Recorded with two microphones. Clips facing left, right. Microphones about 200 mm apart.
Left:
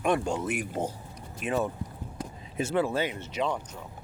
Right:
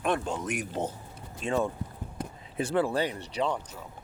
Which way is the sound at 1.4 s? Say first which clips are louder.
Even; 25° right (ahead or behind).